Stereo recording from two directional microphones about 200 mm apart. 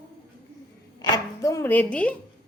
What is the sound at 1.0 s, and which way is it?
Chopping, 20° left (ahead or behind).